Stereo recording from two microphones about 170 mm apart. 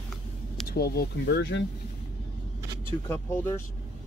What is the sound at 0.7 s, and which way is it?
Speech, 65° left (ahead or behind).